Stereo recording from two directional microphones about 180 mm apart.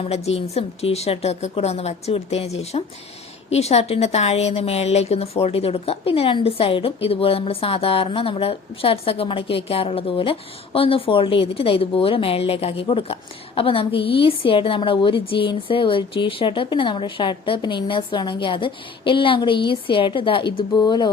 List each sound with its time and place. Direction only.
0.0 s a woman's voice: 35° left (ahead or behind)